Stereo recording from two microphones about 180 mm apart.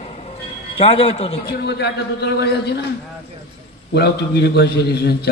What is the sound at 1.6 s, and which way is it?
A man's voice, 65° left (ahead or behind).